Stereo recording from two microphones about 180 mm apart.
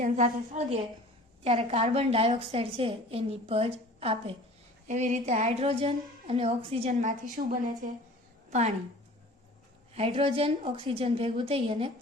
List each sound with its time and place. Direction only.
0.0 s a woman's voice: 40° right (ahead or behind)
9.9 s a woman's voice: 35° right (ahead or behind)